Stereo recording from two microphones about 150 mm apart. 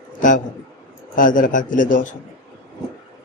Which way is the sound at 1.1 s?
65° left (ahead or behind).